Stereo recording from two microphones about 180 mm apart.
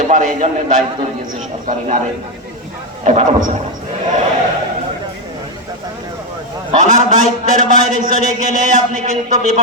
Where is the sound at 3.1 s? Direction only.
40° right (ahead or behind).